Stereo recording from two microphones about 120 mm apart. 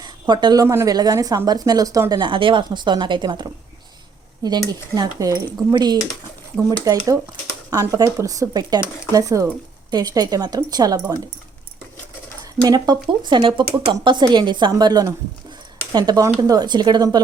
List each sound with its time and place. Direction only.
0.0 s speech: 35° right (ahead or behind)
12.4 s speech: 30° right (ahead or behind)